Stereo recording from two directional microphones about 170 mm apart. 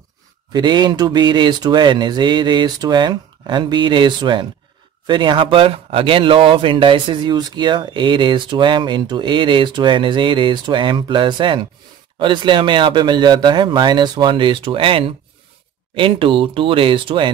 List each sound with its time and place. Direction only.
0.5 s speech: 25° right (ahead or behind)